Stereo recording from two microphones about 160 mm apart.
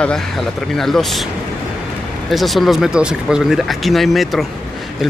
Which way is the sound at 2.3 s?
Centre (ahead or behind).